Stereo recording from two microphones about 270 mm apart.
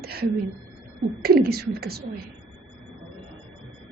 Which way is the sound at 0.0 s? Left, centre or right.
Right.